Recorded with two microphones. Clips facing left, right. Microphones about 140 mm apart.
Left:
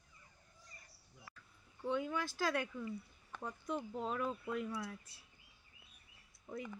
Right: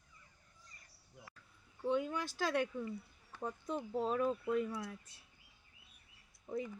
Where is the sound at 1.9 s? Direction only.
20° right (ahead or behind).